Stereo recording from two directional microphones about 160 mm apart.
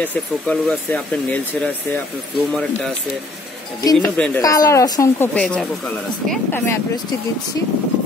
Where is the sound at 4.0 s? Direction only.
10° left (ahead or behind).